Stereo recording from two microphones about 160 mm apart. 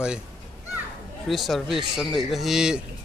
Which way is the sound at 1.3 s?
Centre (ahead or behind).